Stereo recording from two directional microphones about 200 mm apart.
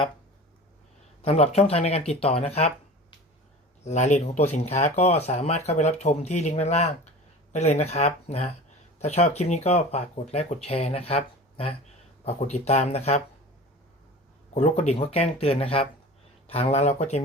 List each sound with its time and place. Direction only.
1.2 s speech: 30° left (ahead or behind)
3.8 s speech: 35° left (ahead or behind)
14.5 s speech: 35° left (ahead or behind)